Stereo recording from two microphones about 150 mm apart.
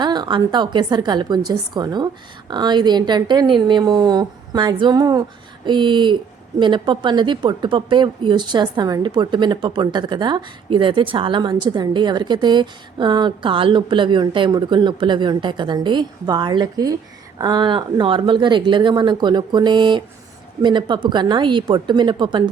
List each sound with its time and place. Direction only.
0.0 s a woman's voice: 30° right (ahead or behind)